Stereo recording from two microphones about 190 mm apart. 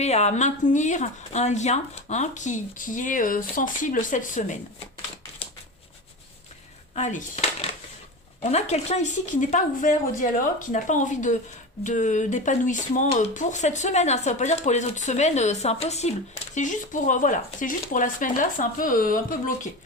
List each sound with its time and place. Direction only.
0.0 s speech: 35° left (ahead or behind)
6.9 s speech: 40° left (ahead or behind)
8.4 s speech: 35° left (ahead or behind)